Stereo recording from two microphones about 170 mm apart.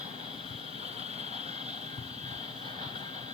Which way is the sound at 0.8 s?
40° right (ahead or behind).